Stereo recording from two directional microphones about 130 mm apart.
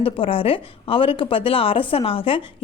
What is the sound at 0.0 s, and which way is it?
A woman's voice, 45° left (ahead or behind).